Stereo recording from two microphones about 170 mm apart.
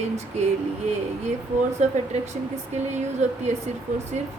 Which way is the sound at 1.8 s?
40° right (ahead or behind).